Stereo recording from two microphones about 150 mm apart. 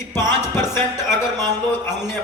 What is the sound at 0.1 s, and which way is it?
Music, 15° left (ahead or behind).